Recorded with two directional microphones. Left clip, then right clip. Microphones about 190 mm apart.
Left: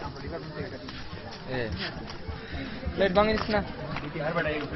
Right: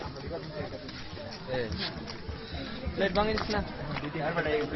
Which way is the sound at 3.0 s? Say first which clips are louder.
Left 5 dB; 50° left (ahead or behind).